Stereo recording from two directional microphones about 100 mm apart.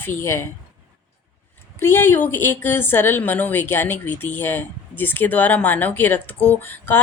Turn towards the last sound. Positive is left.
turn(degrees=20)  # may be behind; listen again after turning